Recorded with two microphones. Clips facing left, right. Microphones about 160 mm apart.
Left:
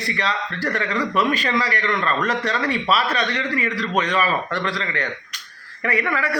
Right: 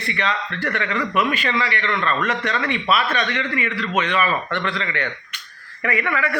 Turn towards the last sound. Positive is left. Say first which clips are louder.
# even
turn(degrees=35)  # may be behind; listen again after turning